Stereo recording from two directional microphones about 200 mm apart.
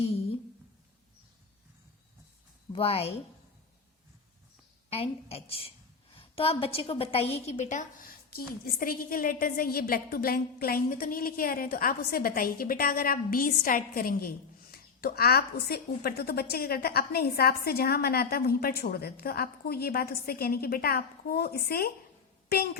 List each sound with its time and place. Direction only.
2.7 s a woman's voice: 30° left (ahead or behind)
4.9 s a woman's voice: 30° left (ahead or behind); by 21.9 s 50° left (ahead or behind)